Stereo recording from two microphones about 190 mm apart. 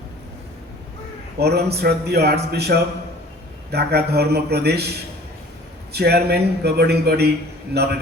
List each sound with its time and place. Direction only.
1.4 s a man's voice: 60° right (ahead or behind)
5.9 s a man's voice: 55° right (ahead or behind)